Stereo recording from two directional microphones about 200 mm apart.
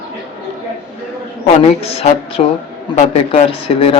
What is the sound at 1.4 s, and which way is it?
Speech, 30° left (ahead or behind).